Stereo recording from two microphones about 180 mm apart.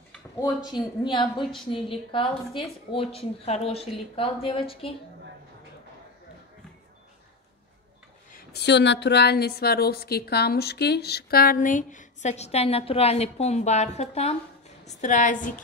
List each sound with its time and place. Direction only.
0.7 s a woman's voice: 25° left (ahead or behind)
8.3 s a woman's voice: 60° left (ahead or behind)